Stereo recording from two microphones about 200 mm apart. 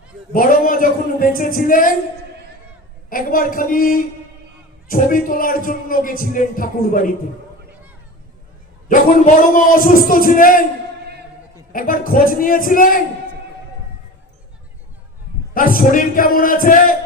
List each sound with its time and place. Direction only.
0.3 s a sound: 45° left (ahead or behind)
3.1 s a man's voice: 45° left (ahead or behind)
8.9 s a man's voice: 40° left (ahead or behind)
11.7 s a man's voice: 45° left (ahead or behind)
15.5 s a man's voice: 45° left (ahead or behind)